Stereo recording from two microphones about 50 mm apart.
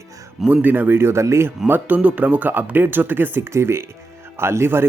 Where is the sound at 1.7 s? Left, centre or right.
Right.